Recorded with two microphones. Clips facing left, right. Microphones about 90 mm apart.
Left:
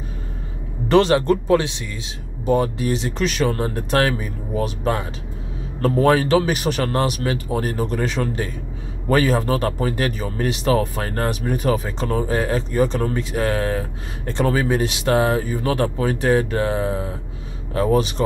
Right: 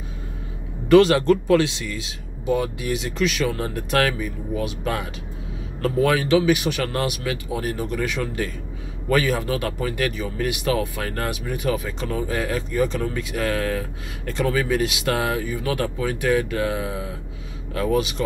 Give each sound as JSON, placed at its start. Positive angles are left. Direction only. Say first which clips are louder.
{"t": 0.8, "sound": "speech", "louder": "right 1 dB", "side_deg": 25}
{"t": 2.4, "sound": "speech", "louder": "left 4 dB", "side_deg": 40}